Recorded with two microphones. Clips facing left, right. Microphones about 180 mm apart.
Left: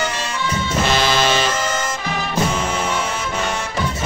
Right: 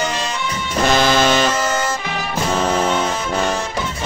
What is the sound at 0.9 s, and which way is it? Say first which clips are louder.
Music: right 4 dB; 50° right (ahead or behind).